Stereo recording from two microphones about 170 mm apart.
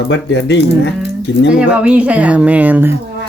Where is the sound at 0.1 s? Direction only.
90° left.